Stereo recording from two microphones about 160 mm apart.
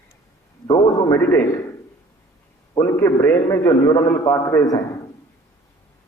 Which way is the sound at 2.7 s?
20° left (ahead or behind).